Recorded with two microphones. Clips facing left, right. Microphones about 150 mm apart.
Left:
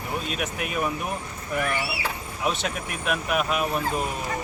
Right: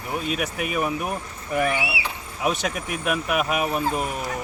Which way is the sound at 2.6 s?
5° right (ahead or behind).